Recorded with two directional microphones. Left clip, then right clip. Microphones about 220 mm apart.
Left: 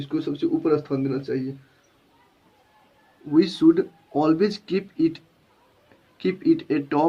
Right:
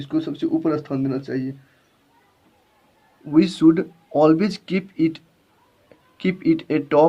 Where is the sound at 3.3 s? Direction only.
50° right (ahead or behind).